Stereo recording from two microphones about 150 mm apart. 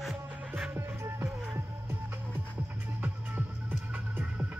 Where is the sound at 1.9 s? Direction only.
15° right (ahead or behind).